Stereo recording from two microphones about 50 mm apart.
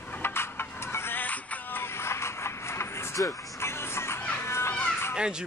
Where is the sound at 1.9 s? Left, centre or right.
Left.